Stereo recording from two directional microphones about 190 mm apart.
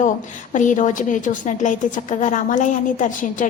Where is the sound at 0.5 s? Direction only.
40° left (ahead or behind).